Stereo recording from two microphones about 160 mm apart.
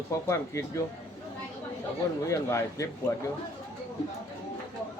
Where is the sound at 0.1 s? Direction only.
20° left (ahead or behind).